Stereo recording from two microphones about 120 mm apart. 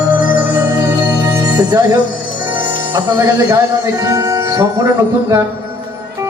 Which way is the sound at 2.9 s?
35° right (ahead or behind).